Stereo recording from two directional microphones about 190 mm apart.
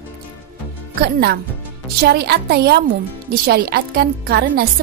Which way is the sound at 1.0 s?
55° right (ahead or behind).